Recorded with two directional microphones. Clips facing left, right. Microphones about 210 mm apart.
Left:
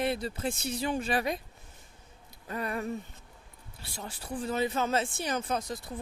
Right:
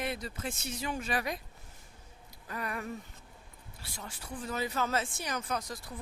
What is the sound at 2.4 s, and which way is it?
Speech, 30° left (ahead or behind).